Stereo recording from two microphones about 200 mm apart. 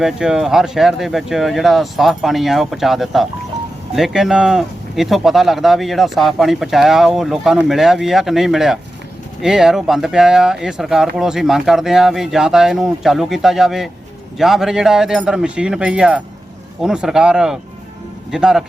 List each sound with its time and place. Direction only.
0.0 s speech: centre (ahead or behind)